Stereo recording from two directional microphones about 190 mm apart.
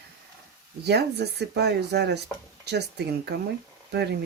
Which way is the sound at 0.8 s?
60° right (ahead or behind).